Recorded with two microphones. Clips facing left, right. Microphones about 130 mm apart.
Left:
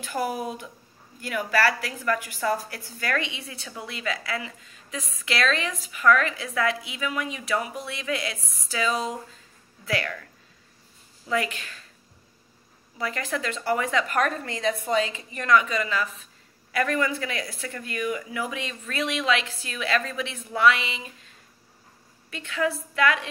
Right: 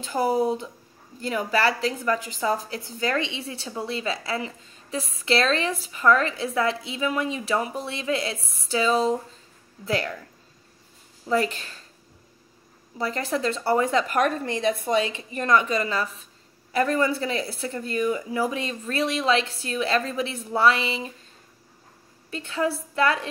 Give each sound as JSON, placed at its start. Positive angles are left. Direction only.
{"t": 0.0, "sound": "a woman's voice", "side_deg": -25}
{"t": 11.2, "sound": "speech", "side_deg": -35}
{"t": 12.9, "sound": "speech", "side_deg": -35}
{"t": 14.2, "sound": "speech", "side_deg": -25}
{"t": 22.3, "sound": "speech", "side_deg": -30}